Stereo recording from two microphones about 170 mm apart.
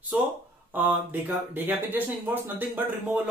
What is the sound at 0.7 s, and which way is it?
Speech, 10° right (ahead or behind).